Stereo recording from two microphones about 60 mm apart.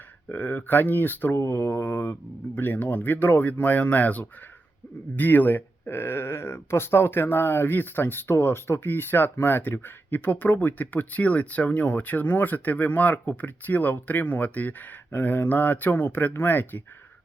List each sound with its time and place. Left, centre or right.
0.3 s speech: left